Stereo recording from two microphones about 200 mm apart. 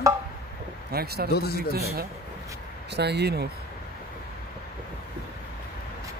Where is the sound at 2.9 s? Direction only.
55° right (ahead or behind).